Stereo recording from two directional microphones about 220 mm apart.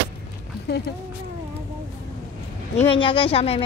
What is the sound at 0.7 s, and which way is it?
Speech, 45° left (ahead or behind).